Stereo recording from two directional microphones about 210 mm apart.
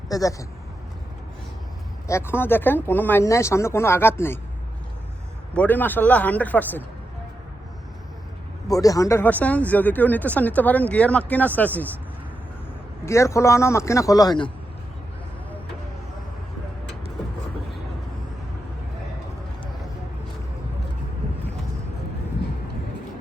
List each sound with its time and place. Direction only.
0.1 s speech: 15° left (ahead or behind)
2.0 s speech: 10° left (ahead or behind)
5.5 s speech: 10° left (ahead or behind)
8.6 s speech: 15° left (ahead or behind)
13.1 s speech: 15° left (ahead or behind)